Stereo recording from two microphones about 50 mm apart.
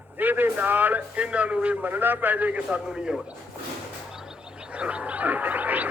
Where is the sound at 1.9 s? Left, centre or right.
Right.